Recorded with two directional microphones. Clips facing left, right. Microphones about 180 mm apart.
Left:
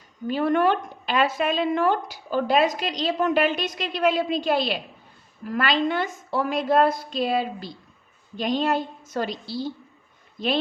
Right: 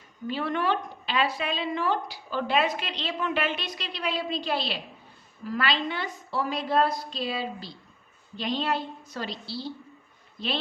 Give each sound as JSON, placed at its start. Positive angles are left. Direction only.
{"t": 0.3, "sound": "a woman's voice", "side_deg": 45}